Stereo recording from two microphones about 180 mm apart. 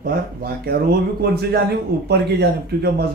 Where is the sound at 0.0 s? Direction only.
55° right (ahead or behind).